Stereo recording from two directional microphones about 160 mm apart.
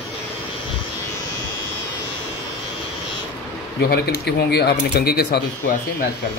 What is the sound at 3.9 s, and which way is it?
Speech, 90° left.